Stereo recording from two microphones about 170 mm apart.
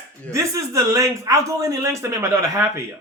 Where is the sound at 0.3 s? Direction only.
20° right (ahead or behind).